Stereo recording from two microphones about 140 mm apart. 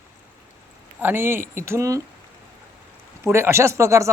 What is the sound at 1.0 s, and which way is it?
Speech, 15° right (ahead or behind).